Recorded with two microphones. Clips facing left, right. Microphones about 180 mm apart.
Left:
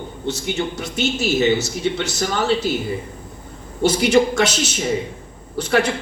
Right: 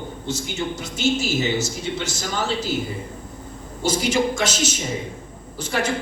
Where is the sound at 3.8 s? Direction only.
65° left (ahead or behind).